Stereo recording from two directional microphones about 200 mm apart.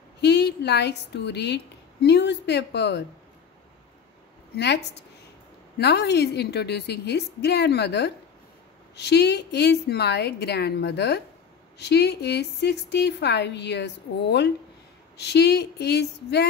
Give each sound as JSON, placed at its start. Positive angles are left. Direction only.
{"t": 0.2, "sound": "a woman's voice", "side_deg": 55}
{"t": 4.6, "sound": "a woman's voice", "side_deg": 60}